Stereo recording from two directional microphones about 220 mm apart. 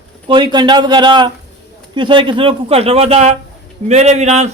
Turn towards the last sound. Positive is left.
turn(degrees=-30)  # may be behind; listen again after turning